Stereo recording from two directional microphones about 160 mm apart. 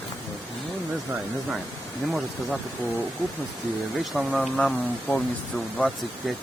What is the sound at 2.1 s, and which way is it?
Speech, 10° left (ahead or behind).